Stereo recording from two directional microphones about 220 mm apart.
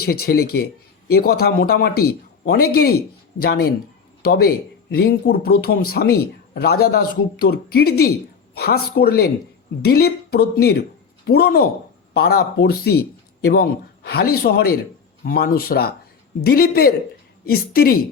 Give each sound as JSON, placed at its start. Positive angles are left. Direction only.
{"t": 0.0, "sound": "speech", "side_deg": 45}